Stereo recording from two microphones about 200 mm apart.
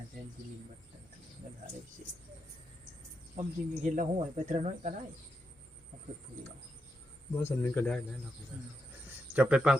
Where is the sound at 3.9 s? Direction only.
40° right (ahead or behind).